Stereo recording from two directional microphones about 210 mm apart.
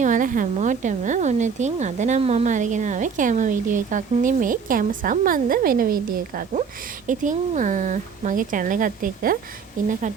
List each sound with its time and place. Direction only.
0.0 s speech: 40° right (ahead or behind)